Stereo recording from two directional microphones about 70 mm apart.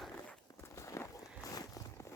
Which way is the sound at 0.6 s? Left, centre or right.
Left.